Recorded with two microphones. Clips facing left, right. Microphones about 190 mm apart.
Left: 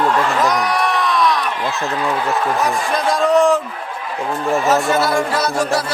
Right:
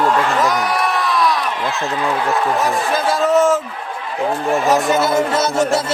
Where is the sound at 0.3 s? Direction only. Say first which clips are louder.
Even; centre (ahead or behind).